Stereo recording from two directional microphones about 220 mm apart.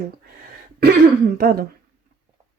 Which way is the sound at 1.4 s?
45° right (ahead or behind).